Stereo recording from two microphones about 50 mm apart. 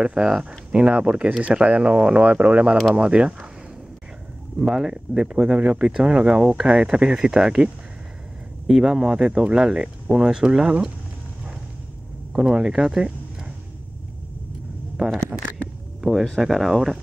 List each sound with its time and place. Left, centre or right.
0.0 s speech: centre
4.7 s speech: centre
8.6 s speech: centre
8.9 s speech: centre
12.3 s speech: centre
15.0 s speech: right
16.0 s speech: centre